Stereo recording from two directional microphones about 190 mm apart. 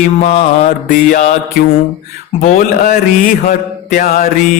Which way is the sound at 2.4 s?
45° left (ahead or behind).